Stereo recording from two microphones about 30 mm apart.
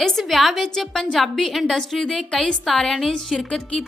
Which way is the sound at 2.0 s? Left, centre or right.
Left.